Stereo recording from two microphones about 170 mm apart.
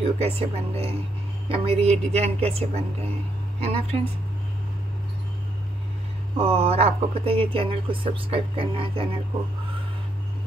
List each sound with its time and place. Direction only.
0.2 s speech: 35° right (ahead or behind)
6.3 s speech: 35° right (ahead or behind)